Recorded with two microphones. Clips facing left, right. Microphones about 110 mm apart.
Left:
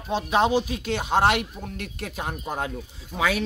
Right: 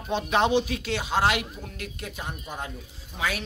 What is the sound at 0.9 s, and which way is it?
Speech, 55° left (ahead or behind).